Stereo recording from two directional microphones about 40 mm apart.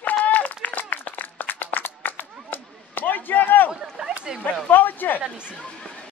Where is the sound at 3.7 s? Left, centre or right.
Centre.